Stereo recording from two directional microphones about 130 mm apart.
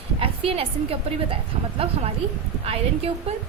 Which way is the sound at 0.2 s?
45° right (ahead or behind).